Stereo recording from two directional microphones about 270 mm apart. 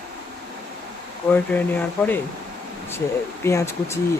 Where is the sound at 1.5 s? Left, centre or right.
Centre.